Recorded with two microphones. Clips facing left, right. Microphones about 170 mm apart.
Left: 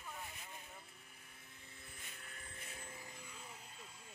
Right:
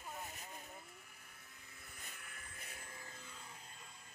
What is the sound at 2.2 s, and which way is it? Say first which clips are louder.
Vehicle: left 1 dB; 30° left (ahead or behind).